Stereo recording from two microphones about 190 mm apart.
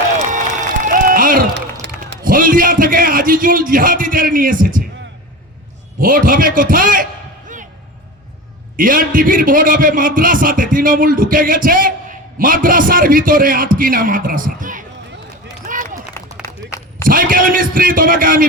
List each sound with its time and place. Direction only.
0.8 s applause: 45° right (ahead or behind)
1.8 s a sound: 70° right (ahead or behind)
2.2 s a man's voice: 45° right (ahead or behind)
6.0 s a man's voice: 45° right (ahead or behind)
8.7 s a man's voice: 45° right (ahead or behind)
15.6 s run: 45° right (ahead or behind)
16.4 s a sound: 15° left (ahead or behind)
17.0 s a man's voice: 45° right (ahead or behind)